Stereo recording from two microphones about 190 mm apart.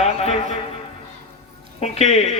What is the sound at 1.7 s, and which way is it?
Speech, 35° left (ahead or behind).